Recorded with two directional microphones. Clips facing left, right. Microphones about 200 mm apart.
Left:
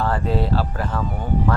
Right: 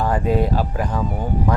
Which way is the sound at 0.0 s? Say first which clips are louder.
Right 3 dB; 15° right (ahead or behind).